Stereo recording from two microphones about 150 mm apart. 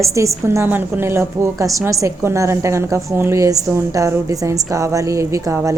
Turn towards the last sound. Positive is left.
turn(degrees=-20)  # may be behind; listen again after turning